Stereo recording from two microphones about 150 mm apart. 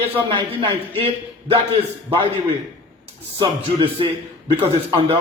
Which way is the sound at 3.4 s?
35° right (ahead or behind).